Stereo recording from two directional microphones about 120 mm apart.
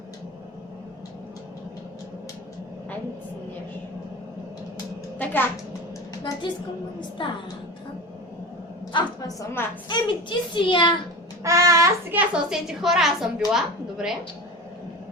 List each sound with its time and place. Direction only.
5.1 s a sound: 15° left (ahead or behind)
7.2 s a woman's voice: 45° left (ahead or behind)
8.9 s a sound: 40° left (ahead or behind)
9.4 s a woman's voice: 20° left (ahead or behind)
9.9 s a woman's voice: 45° left (ahead or behind)
11.4 s speech: 25° right (ahead or behind)
12.1 s a woman's voice: 5° right (ahead or behind)